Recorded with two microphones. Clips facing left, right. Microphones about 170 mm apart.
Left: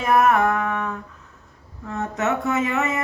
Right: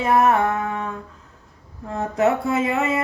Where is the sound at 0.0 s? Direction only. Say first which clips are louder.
Even; 30° right (ahead or behind).